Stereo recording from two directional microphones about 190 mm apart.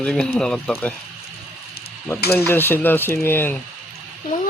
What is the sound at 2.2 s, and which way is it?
Stir, 55° left (ahead or behind).